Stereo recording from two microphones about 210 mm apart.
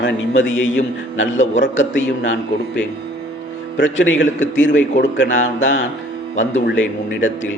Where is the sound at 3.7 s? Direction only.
60° left (ahead or behind).